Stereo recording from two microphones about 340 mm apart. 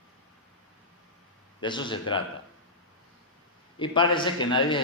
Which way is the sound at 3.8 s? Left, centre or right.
Centre.